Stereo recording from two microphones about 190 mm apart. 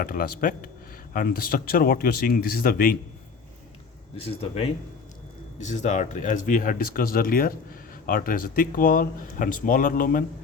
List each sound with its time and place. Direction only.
0.0 s speech: 50° left (ahead or behind)
4.2 s speech: 30° left (ahead or behind); by 10.2 s 45° left (ahead or behind)